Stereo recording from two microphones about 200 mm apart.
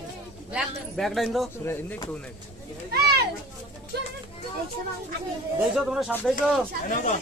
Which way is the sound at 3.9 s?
55° right (ahead or behind).